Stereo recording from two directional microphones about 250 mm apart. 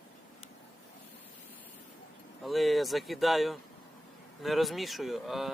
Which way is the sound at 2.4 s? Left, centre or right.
Centre.